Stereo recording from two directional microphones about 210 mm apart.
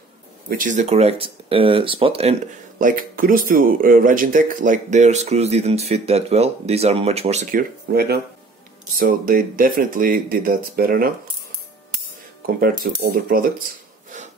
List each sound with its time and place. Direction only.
0.5 s speech: 40° right (ahead or behind)
2.8 s speech: 40° right (ahead or behind)
7.9 s speech: 50° right (ahead or behind)
12.5 s speech: 45° right (ahead or behind)